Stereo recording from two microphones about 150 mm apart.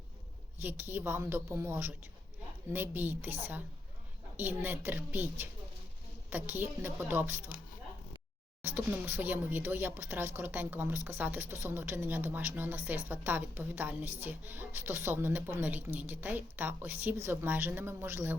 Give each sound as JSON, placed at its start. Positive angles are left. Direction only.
{"t": 0.6, "sound": "a woman's voice", "side_deg": -15}
{"t": 4.4, "sound": "a woman's voice", "side_deg": -10}
{"t": 8.6, "sound": "a woman's voice", "side_deg": -10}